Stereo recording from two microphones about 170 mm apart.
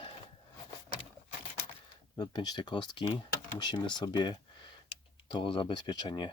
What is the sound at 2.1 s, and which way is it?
Speech, 25° left (ahead or behind).